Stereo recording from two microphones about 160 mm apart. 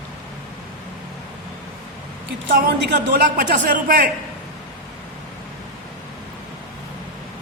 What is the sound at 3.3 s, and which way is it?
Speech, 60° right (ahead or behind).